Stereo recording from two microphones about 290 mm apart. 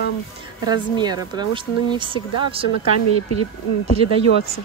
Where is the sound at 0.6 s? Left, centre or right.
Centre.